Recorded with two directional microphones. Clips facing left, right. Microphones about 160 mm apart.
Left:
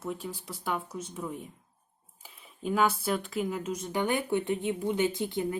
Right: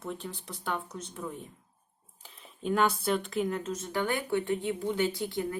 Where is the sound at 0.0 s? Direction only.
5° left (ahead or behind).